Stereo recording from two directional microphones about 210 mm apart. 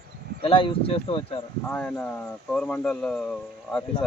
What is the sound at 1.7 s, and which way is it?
Speech, 5° left (ahead or behind).